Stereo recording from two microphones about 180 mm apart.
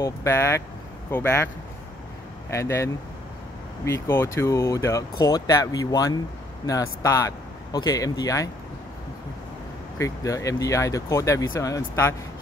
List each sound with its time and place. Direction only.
0.0 s speech: 15° left (ahead or behind)
2.5 s speech: 15° left (ahead or behind)
9.9 s speech: 15° left (ahead or behind)